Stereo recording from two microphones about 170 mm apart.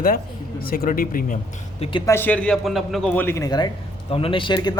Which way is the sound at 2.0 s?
15° left (ahead or behind).